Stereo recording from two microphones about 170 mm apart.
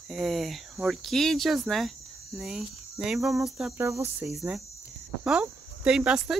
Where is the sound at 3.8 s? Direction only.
15° right (ahead or behind).